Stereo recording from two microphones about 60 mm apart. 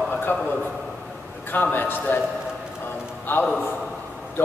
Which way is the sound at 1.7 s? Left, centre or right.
Left.